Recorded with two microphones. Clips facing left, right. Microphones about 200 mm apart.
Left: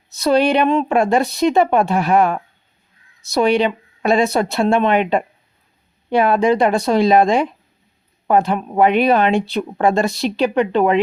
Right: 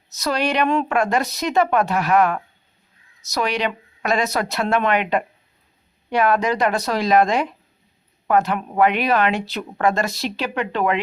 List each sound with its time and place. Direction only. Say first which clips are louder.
0.2 s a woman's voice: left 6 dB; 30° left (ahead or behind)
10.1 s speech: left 6 dB; centre (ahead or behind)
10.5 s a woman's voice: left 5 dB; 30° left (ahead or behind)